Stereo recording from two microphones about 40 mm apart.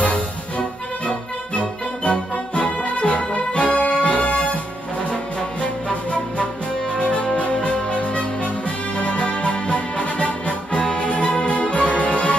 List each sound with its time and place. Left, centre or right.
0.0 s music: left
7.2 s music: left